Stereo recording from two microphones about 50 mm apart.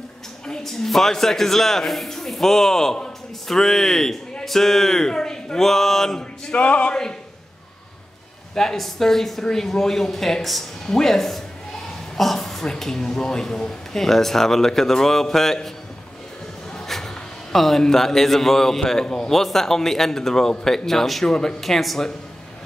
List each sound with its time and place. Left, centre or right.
0.5 s a man's voice: centre
6.5 s speech: left
8.5 s a man's voice: centre
16.7 s a man's voice: centre